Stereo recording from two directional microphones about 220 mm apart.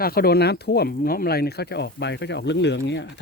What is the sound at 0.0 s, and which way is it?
Speech, 45° left (ahead or behind).